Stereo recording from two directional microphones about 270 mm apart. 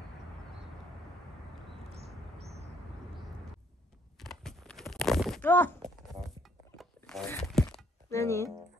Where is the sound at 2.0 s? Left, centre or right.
Right.